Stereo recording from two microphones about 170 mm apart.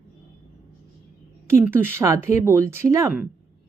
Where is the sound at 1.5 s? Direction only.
15° right (ahead or behind).